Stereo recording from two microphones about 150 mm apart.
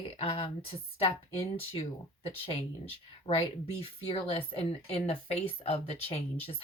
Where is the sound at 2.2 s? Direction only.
40° left (ahead or behind).